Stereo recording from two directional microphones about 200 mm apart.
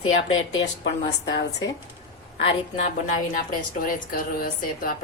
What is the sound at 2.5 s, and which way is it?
A woman's voice, 35° left (ahead or behind).